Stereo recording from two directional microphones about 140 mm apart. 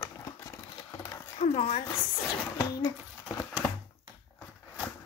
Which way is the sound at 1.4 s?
50° left (ahead or behind).